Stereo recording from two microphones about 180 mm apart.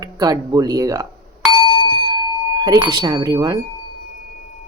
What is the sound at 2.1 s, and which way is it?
Speech, 20° right (ahead or behind).